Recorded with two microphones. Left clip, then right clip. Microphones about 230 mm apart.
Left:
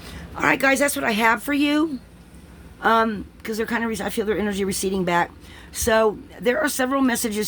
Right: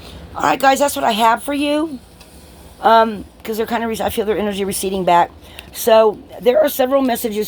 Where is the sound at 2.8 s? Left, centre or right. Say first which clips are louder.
Right 7 dB; left.